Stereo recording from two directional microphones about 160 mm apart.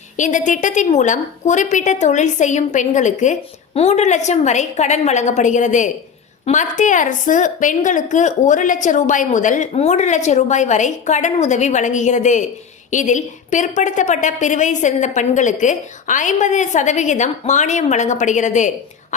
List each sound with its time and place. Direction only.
0.2 s a woman's voice: 50° left (ahead or behind)